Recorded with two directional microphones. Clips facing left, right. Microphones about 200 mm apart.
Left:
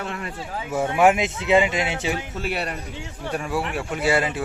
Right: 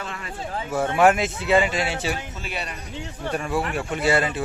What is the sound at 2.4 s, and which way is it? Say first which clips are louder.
Speech: left 5 dB; 60° left (ahead or behind).